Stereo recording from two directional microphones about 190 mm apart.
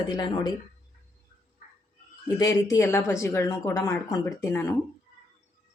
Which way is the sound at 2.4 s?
15° left (ahead or behind).